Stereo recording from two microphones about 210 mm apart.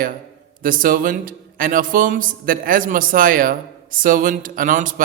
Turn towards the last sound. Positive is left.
turn(degrees=-40)  # may be behind; listen again after turning